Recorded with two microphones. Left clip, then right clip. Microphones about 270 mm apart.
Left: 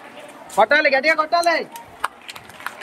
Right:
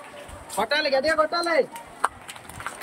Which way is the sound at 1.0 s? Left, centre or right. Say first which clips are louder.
Left 5 dB; left.